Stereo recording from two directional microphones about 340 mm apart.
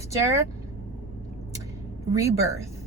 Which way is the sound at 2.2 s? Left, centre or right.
Centre.